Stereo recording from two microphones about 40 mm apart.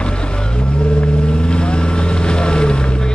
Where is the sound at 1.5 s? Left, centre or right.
Left.